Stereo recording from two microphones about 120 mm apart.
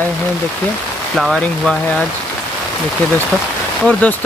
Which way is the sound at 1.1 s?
Centre (ahead or behind).